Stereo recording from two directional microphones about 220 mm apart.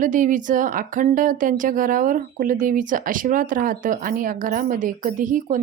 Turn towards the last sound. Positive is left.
turn(degrees=-35)  # may be behind; listen again after turning